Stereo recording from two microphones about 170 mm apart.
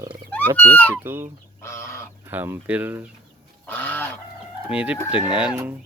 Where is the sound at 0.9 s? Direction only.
15° right (ahead or behind).